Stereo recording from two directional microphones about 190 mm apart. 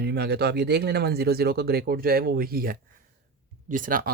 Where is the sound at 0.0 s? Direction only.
60° right (ahead or behind).